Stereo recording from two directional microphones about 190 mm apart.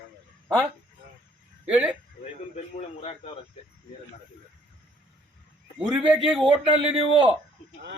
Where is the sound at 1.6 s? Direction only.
5° right (ahead or behind).